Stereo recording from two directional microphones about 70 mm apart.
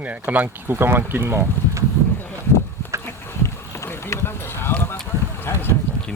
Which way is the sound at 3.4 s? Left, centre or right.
Left.